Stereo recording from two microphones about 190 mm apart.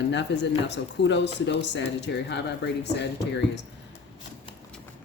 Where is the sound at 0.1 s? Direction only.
70° left (ahead or behind).